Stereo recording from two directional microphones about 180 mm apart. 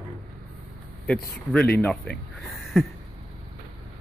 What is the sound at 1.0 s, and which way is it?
Speech, 5° left (ahead or behind).